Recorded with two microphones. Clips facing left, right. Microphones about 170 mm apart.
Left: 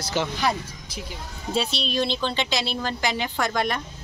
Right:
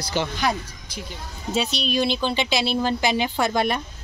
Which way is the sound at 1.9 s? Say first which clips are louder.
Right 3 dB; 5° right (ahead or behind).